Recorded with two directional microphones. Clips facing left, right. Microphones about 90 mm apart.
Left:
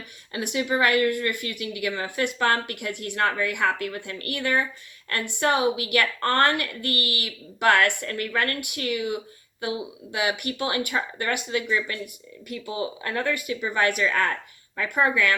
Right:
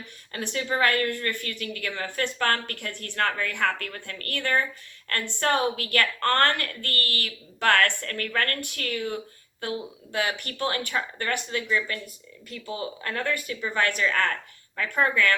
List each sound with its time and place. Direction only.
0.3 s speech: 15° left (ahead or behind)